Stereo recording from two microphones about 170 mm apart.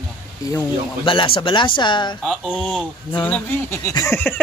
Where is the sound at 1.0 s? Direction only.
30° left (ahead or behind).